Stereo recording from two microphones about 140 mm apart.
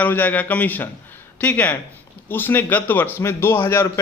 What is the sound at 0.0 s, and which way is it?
A man's voice, 10° left (ahead or behind).